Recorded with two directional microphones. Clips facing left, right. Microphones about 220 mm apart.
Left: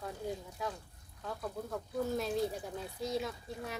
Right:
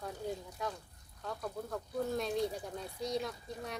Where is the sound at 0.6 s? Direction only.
Centre (ahead or behind).